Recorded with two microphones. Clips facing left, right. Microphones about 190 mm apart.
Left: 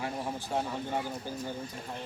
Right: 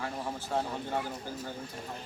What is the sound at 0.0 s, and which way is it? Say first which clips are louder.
Speech: left 1 dB; 15° left (ahead or behind).